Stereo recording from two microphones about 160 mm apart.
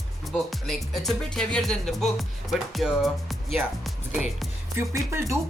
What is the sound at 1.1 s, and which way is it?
Music, 5° left (ahead or behind).